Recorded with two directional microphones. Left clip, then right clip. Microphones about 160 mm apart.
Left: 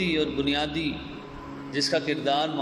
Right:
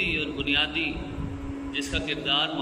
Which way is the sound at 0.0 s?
40° left (ahead or behind).